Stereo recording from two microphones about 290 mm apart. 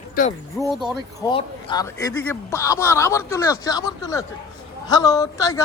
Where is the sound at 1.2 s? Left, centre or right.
Centre.